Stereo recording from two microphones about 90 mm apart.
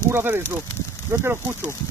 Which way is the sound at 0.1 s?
25° right (ahead or behind).